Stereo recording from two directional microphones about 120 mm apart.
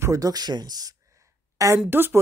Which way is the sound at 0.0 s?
30° right (ahead or behind).